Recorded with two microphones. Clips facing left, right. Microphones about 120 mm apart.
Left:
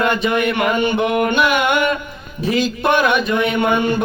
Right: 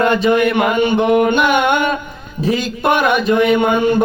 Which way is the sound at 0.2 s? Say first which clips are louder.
Right 4 dB; 25° right (ahead or behind).